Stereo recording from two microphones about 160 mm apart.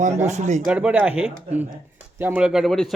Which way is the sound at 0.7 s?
5° right (ahead or behind).